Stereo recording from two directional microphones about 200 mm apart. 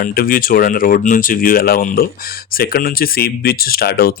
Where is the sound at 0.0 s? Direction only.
45° left (ahead or behind).